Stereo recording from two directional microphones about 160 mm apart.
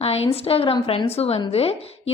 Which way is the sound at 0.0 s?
40° left (ahead or behind).